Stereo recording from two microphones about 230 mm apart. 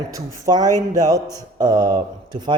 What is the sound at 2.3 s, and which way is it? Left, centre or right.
Speech, centre.